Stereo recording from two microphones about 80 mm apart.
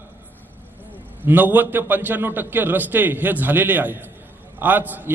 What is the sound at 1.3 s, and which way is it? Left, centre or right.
A man's voice, right.